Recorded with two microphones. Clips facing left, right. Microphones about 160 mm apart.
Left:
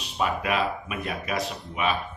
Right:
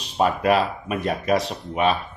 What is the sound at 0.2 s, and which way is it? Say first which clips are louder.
Speech: right 6 dB; 40° right (ahead or behind).